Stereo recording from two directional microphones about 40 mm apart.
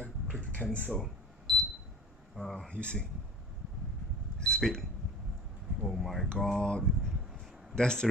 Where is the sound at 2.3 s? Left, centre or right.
Centre.